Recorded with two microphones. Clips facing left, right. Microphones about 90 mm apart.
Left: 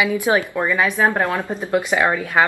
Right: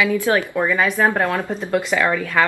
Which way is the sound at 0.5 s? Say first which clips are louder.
Right 1 dB; centre (ahead or behind).